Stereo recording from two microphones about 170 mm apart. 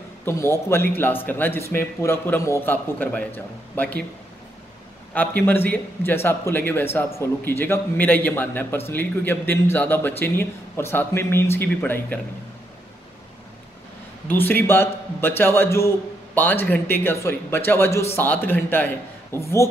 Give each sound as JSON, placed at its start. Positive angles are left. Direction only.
{"t": 0.2, "sound": "a man's voice", "side_deg": 15}
{"t": 5.1, "sound": "a man's voice", "side_deg": 10}
{"t": 14.2, "sound": "a man's voice", "side_deg": 10}